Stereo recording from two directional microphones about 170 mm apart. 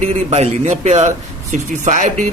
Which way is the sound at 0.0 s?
40° right (ahead or behind).